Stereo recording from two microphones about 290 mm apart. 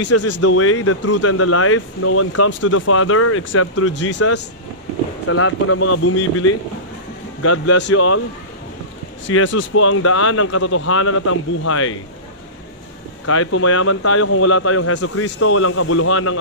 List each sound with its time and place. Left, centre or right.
0.4 s speech: left
9.3 s speech: left
13.2 s speech: left